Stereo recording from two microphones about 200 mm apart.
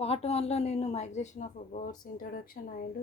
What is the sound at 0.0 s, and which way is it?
A woman's voice, 30° left (ahead or behind).